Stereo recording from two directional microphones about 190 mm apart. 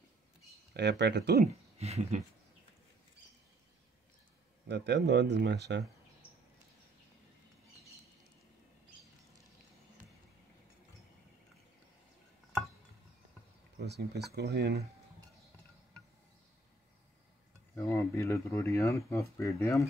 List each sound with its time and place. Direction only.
0.7 s speech: 65° right (ahead or behind)
1.4 s speech: 35° right (ahead or behind)
4.6 s speech: 65° right (ahead or behind)
13.7 s speech: 60° right (ahead or behind)
17.7 s speech: 15° left (ahead or behind)